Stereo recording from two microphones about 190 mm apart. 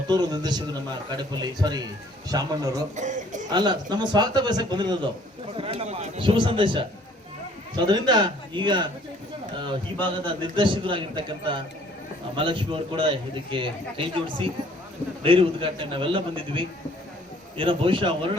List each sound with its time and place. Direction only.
0.1 s a man's voice: 20° right (ahead or behind)
2.9 s speech: 40° right (ahead or behind)
3.5 s a man's voice: 20° right (ahead or behind)
10.4 s a man's voice: 25° right (ahead or behind)